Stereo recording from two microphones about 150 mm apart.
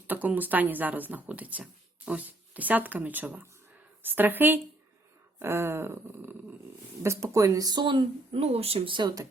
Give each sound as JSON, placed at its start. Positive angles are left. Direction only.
{"t": 0.1, "sound": "speech", "side_deg": -10}